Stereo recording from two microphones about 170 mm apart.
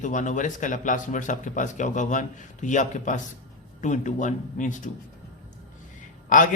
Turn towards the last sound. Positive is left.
turn(degrees=50)  # may be behind; listen again after turning